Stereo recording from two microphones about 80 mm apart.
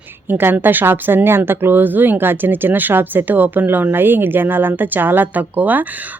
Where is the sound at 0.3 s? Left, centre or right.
Right.